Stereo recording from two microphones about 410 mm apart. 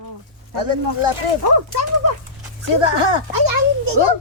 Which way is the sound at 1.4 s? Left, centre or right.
Right.